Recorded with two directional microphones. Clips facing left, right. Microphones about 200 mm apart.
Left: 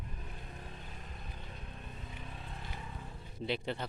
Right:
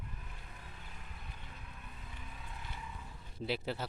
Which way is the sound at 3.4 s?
5° right (ahead or behind).